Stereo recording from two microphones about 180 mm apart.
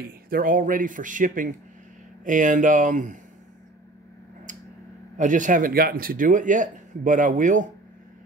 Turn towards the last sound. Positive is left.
turn(degrees=-45)  # may be behind; listen again after turning